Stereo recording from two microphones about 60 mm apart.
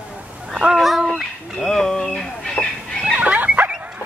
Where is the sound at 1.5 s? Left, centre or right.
Centre.